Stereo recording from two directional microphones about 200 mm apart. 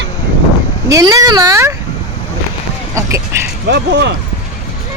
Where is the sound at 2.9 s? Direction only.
15° right (ahead or behind).